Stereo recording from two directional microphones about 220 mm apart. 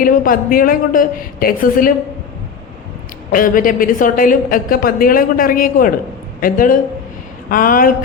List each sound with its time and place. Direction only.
0.0 s a woman's voice: 40° left (ahead or behind)
3.3 s a woman's voice: 40° left (ahead or behind)